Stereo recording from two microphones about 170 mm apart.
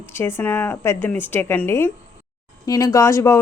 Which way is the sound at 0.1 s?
15° left (ahead or behind).